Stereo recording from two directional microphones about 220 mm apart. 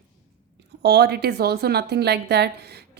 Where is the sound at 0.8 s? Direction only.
50° right (ahead or behind).